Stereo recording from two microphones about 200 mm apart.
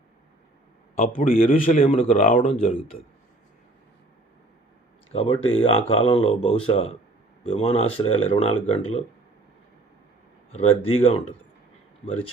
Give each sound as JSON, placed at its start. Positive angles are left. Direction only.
{"t": 0.9, "sound": "a man's voice", "side_deg": 45}
{"t": 1.6, "sound": "speech", "side_deg": 30}
{"t": 2.1, "sound": "a man's voice", "side_deg": 45}
{"t": 2.4, "sound": "speech", "side_deg": 30}
{"t": 5.1, "sound": "speech", "side_deg": 30}
{"t": 10.5, "sound": "speech", "side_deg": 35}